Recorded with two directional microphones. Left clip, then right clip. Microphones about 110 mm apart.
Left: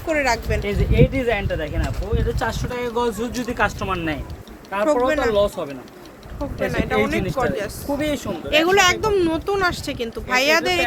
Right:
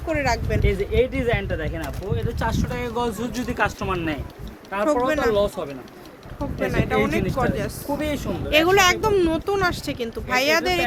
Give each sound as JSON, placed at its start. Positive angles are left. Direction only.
{"t": 0.1, "sound": "speech", "side_deg": 0}
{"t": 0.6, "sound": "speech", "side_deg": -30}
{"t": 3.4, "sound": "speech", "side_deg": -15}
{"t": 5.0, "sound": "speech", "side_deg": -20}
{"t": 5.3, "sound": "speech", "side_deg": -5}
{"t": 7.9, "sound": "speech", "side_deg": 20}
{"t": 8.4, "sound": "speech", "side_deg": -20}
{"t": 9.5, "sound": "speech", "side_deg": -15}